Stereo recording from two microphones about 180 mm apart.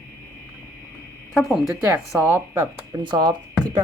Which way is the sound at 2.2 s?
10° right (ahead or behind).